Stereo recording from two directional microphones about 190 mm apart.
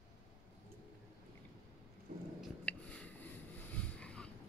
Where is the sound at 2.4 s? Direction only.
5° left (ahead or behind).